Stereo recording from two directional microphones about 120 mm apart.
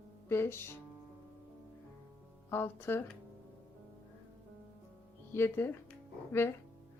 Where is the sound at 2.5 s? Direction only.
20° left (ahead or behind).